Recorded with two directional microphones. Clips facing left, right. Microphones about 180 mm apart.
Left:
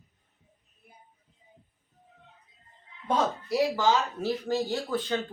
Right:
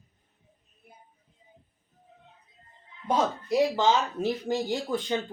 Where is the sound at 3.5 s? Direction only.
20° right (ahead or behind).